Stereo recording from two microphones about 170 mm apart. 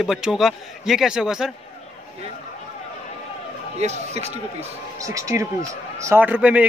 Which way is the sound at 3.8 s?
40° right (ahead or behind).